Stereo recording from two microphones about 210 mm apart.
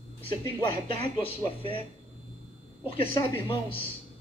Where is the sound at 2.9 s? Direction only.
25° left (ahead or behind).